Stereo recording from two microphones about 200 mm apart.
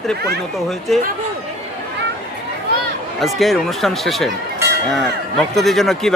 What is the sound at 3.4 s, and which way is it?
A man's voice, centre (ahead or behind).